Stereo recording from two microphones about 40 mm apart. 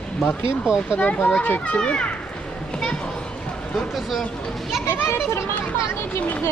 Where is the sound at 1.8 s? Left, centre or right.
Left.